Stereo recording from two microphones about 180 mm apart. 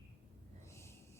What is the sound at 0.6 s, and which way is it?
Snort, 15° left (ahead or behind).